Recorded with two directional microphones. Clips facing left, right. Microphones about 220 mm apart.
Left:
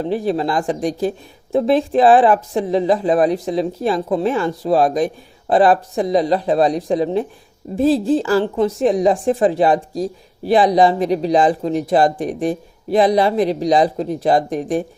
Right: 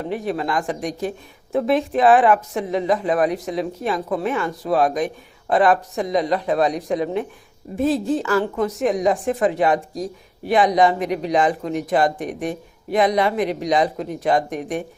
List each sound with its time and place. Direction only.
0.0 s a woman's voice: 30° left (ahead or behind)